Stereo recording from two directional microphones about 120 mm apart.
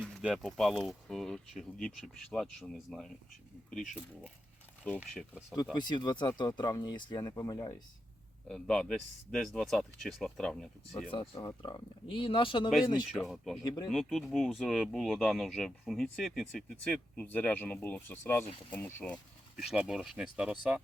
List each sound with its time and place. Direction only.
0.0 s speech: centre (ahead or behind)
5.7 s speech: 40° left (ahead or behind)
8.4 s speech: 5° left (ahead or behind)
11.1 s speech: 40° left (ahead or behind)
13.1 s speech: centre (ahead or behind); by 19.2 s 15° left (ahead or behind)
19.5 s speech: 5° right (ahead or behind)